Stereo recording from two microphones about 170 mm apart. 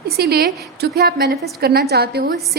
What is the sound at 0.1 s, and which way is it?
A woman's voice, 70° right (ahead or behind).